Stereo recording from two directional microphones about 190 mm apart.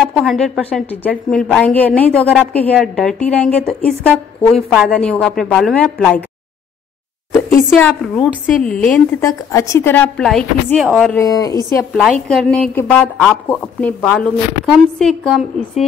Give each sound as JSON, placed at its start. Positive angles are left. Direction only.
{"t": 0.0, "sound": "a woman's voice", "side_deg": 0}
{"t": 7.7, "sound": "a woman's voice", "side_deg": 5}
{"t": 9.2, "sound": "a woman's voice", "side_deg": 15}
{"t": 11.1, "sound": "speech", "side_deg": 20}
{"t": 11.9, "sound": "a woman's voice", "side_deg": 0}